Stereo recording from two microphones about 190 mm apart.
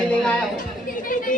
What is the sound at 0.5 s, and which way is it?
Speech, 45° left (ahead or behind).